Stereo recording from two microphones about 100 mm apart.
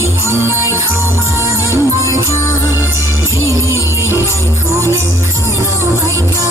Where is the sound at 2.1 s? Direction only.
30° left (ahead or behind).